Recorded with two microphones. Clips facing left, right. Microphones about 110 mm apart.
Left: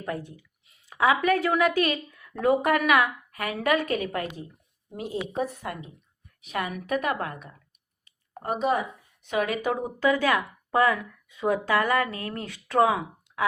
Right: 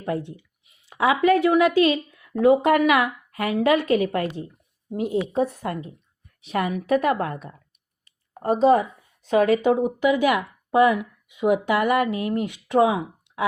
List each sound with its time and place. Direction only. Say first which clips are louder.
0.0 s a woman's voice: right 5 dB; 25° right (ahead or behind)
6.4 s a woman's voice: right 6 dB; 35° right (ahead or behind)